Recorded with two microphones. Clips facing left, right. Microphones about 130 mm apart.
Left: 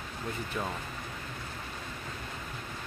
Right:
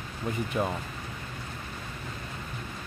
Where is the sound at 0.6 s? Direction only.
15° right (ahead or behind).